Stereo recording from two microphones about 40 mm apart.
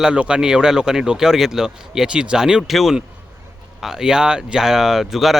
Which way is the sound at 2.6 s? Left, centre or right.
Centre.